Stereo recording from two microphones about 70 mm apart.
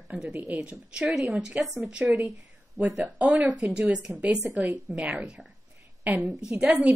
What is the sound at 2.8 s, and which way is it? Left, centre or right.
Speech, right.